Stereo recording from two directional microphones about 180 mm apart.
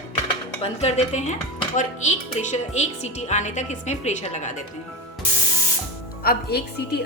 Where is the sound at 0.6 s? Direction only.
35° left (ahead or behind).